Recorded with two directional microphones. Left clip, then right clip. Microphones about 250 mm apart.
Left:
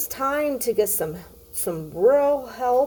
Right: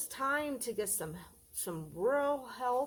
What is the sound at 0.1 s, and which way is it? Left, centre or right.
Speech, centre.